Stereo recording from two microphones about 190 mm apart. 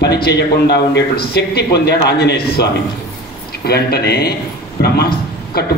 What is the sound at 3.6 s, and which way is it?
A man's voice, 55° left (ahead or behind).